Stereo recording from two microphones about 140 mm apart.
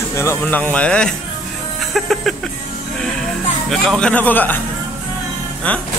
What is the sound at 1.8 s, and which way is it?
Music, centre (ahead or behind).